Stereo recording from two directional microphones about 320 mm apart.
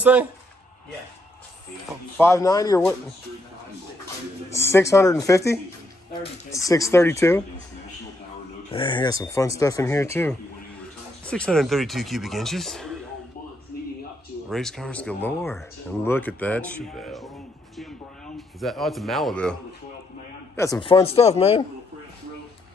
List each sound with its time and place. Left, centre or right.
0.0 s speech: centre
2.1 s speech: centre
4.5 s speech: centre
8.6 s speech: centre
13.7 s a sound: left
14.5 s speech: centre
17.7 s a sound: centre
20.5 s speech: centre